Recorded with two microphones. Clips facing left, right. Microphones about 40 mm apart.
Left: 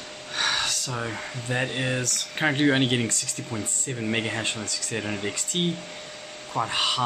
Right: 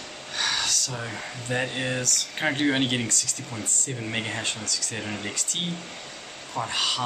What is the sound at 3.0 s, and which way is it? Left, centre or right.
Speech, left.